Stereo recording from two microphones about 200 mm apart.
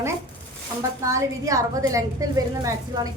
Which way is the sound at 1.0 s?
15° right (ahead or behind).